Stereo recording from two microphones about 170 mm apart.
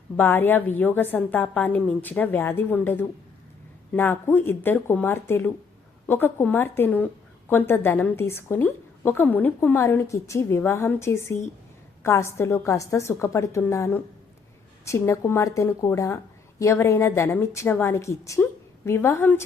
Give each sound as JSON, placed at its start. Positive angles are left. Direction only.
{"t": 0.2, "sound": "a woman's voice", "side_deg": 10}